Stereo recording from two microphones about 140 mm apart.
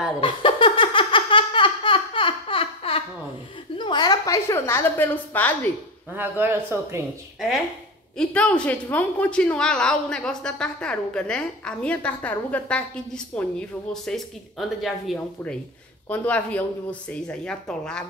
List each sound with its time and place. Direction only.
0.2 s laughter: 35° left (ahead or behind)
3.7 s a woman's voice: 35° left (ahead or behind); by 5.7 s 15° left (ahead or behind)
6.1 s speech: 15° right (ahead or behind)
8.2 s a woman's voice: 10° left (ahead or behind)